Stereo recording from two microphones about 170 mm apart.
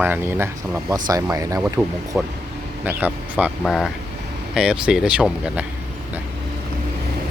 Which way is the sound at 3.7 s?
Centre (ahead or behind).